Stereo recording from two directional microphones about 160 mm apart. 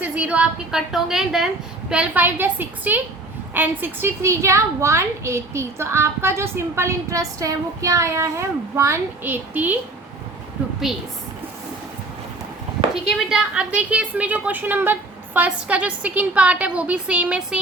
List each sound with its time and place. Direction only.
0.0 s a woman's voice: 10° right (ahead or behind)
13.1 s a woman's voice: 5° right (ahead or behind)